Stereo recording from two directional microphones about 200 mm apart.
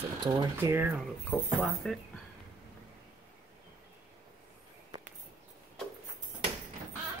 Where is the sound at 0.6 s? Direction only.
10° right (ahead or behind).